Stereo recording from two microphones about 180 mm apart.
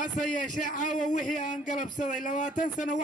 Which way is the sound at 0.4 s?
45° left (ahead or behind).